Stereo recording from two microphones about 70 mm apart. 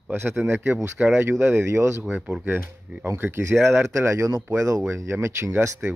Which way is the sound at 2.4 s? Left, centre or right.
Right.